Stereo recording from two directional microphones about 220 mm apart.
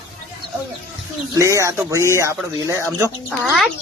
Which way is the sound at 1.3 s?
15° right (ahead or behind).